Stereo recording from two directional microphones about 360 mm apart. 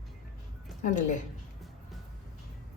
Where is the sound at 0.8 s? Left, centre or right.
Left.